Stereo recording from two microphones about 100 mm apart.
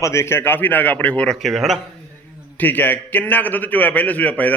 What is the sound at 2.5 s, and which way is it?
A man's voice, 15° left (ahead or behind).